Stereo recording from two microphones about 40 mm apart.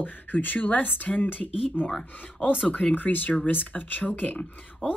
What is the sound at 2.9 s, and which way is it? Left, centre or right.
Speech, left.